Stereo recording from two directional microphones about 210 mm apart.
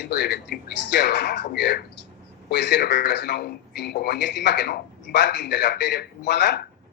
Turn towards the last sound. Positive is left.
turn(degrees=55)  # may be behind; listen again after turning